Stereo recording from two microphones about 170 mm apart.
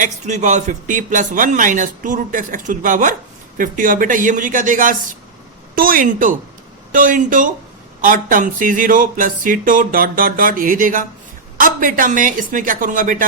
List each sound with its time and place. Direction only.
0.0 s a woman's voice: 45° right (ahead or behind)